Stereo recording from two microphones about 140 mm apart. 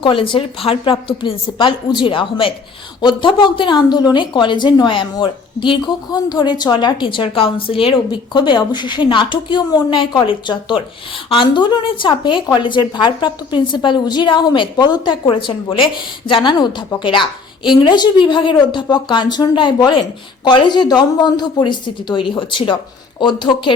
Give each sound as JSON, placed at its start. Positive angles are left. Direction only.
{"t": 0.0, "sound": "speech", "side_deg": 35}